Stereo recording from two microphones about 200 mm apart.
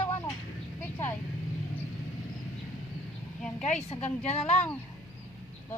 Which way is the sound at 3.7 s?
35° left (ahead or behind).